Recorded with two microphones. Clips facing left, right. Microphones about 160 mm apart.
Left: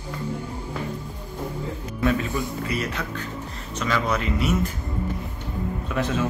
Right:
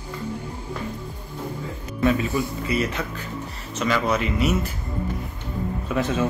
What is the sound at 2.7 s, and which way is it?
Speech, 5° right (ahead or behind).